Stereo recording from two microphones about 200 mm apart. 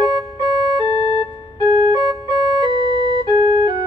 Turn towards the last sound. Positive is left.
turn(degrees=-25)  # may be behind; listen again after turning